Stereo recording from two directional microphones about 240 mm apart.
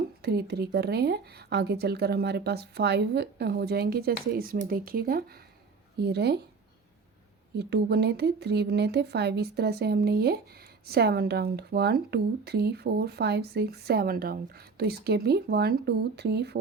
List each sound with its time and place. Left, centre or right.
0.2 s speech: right
7.5 s speech: right